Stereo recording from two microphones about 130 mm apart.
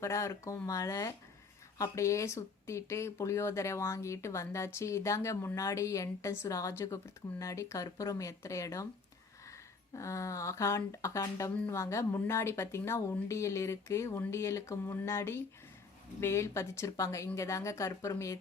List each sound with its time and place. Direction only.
0.0 s speech: 20° left (ahead or behind)
9.9 s speech: 25° left (ahead or behind)